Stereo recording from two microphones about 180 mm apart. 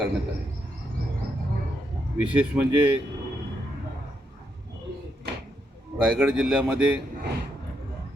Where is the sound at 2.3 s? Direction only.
10° right (ahead or behind).